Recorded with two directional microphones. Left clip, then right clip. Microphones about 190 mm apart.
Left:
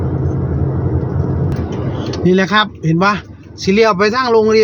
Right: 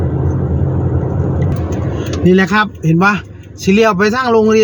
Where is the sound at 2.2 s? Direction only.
Centre (ahead or behind).